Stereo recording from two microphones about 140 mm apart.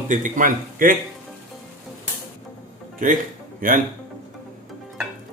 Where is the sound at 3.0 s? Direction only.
70° right (ahead or behind).